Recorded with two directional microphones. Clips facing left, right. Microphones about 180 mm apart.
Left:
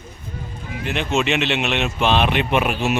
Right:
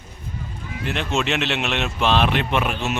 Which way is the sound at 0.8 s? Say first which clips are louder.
Left 2 dB; centre (ahead or behind).